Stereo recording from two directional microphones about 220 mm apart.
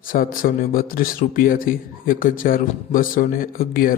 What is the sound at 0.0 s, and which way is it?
Speech, 40° left (ahead or behind).